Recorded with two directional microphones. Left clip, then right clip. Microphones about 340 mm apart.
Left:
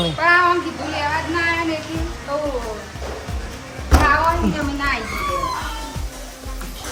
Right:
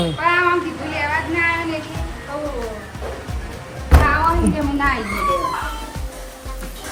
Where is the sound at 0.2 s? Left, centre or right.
Centre.